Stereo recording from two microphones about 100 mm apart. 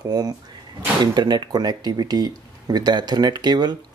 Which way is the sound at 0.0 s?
40° right (ahead or behind).